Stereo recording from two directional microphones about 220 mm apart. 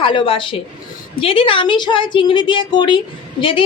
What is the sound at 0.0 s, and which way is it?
A man's voice, 25° left (ahead or behind).